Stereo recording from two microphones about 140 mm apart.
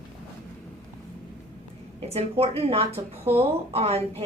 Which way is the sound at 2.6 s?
45° right (ahead or behind).